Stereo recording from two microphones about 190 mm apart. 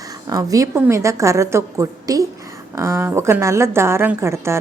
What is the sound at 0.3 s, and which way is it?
A woman's voice, 20° right (ahead or behind).